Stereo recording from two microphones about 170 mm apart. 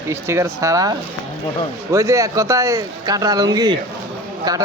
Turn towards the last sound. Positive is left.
turn(degrees=-20)  # may be behind; listen again after turning